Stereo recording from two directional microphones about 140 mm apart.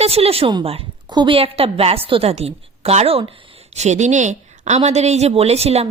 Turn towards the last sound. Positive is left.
turn(degrees=-50)  # may be behind; listen again after turning